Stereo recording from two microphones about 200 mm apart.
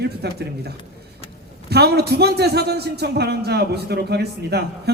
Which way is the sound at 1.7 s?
55° right (ahead or behind).